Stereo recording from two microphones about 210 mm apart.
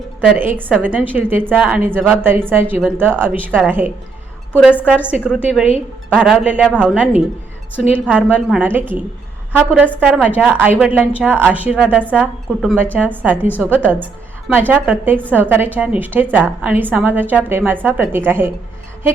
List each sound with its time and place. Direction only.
0.2 s a woman's voice: 5° right (ahead or behind)
4.5 s a woman's voice: 10° left (ahead or behind)
5.1 s a woman's voice: 5° right (ahead or behind)